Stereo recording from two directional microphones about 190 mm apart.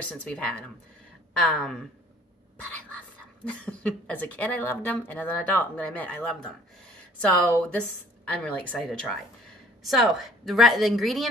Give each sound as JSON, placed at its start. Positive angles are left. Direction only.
{"t": 0.1, "sound": "speech", "side_deg": 5}
{"t": 3.4, "sound": "speech", "side_deg": 5}